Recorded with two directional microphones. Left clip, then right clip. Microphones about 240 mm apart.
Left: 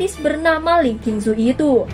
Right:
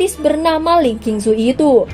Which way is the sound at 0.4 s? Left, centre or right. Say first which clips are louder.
Right 1 dB; right.